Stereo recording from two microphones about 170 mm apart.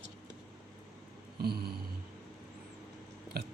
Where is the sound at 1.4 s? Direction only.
65° right (ahead or behind).